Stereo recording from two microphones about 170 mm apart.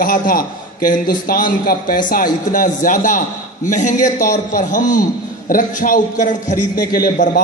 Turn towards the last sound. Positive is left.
turn(degrees=55)  # may be behind; listen again after turning